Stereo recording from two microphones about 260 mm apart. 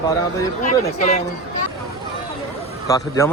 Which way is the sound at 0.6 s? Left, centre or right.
Left.